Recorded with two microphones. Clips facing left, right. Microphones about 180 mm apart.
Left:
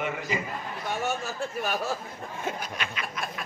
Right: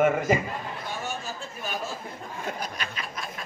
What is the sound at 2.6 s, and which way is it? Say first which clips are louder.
Snicker: even; 40° right (ahead or behind).